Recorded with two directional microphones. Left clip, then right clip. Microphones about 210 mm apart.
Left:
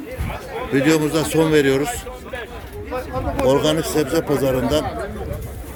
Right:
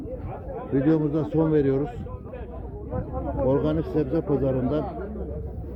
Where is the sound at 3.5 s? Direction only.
5° left (ahead or behind).